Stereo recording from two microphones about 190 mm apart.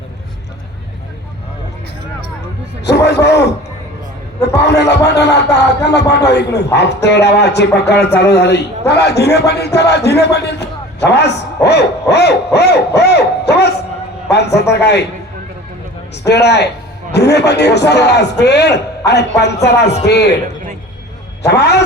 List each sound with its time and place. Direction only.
2.8 s a man's voice: 60° left (ahead or behind)
4.4 s a man's voice: 60° left (ahead or behind)
16.2 s a man's voice: 60° left (ahead or behind)
21.4 s a man's voice: 60° left (ahead or behind)